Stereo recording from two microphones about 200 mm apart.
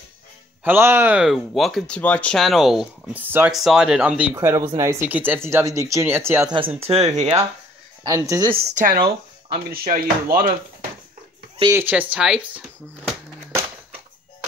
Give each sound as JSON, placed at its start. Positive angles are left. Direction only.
{"t": 0.7, "sound": "speech", "side_deg": -10}
{"t": 6.8, "sound": "speech", "side_deg": -30}
{"t": 8.0, "sound": "speech", "side_deg": -20}
{"t": 8.7, "sound": "speech", "side_deg": -45}
{"t": 11.7, "sound": "speech", "side_deg": -10}